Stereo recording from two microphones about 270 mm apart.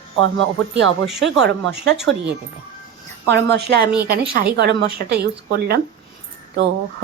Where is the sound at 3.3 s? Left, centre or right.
Right.